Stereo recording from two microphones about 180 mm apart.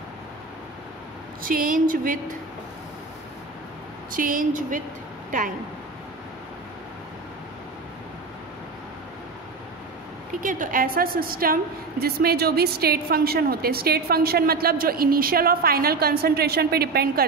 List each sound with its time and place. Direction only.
1.4 s a woman's voice: 50° right (ahead or behind)
4.1 s a woman's voice: 50° right (ahead or behind)
10.4 s a woman's voice: 50° right (ahead or behind)